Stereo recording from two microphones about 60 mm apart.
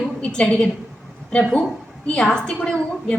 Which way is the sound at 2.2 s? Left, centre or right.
Centre.